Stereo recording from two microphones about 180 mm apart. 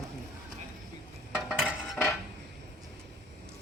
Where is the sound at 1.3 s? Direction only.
5° right (ahead or behind).